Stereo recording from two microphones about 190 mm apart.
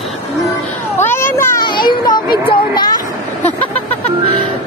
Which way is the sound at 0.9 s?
10° left (ahead or behind).